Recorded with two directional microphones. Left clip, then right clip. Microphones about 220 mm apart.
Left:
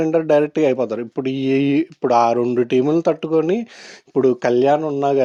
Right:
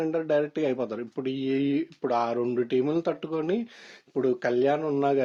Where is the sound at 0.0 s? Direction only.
35° left (ahead or behind).